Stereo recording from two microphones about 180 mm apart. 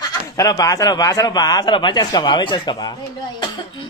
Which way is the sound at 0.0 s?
20° left (ahead or behind).